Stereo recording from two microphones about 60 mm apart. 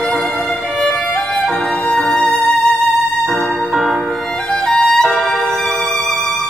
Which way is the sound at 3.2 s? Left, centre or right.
Centre.